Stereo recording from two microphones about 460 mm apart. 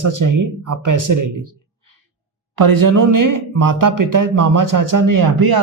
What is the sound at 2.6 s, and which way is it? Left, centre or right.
Speech, right.